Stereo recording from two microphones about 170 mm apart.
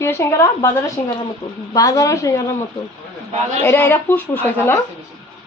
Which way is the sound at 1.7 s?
20° left (ahead or behind).